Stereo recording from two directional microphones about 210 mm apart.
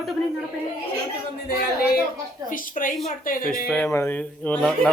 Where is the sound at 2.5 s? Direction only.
40° left (ahead or behind).